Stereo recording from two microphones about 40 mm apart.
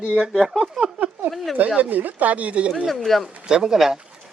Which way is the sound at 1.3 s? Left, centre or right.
Right.